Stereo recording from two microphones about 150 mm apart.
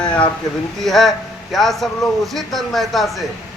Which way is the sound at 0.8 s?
Centre (ahead or behind).